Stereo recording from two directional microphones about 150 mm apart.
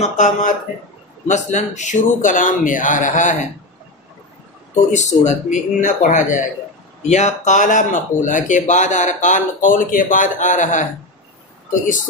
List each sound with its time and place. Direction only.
0.0 s speech: 55° left (ahead or behind)
4.9 s speech: 55° left (ahead or behind)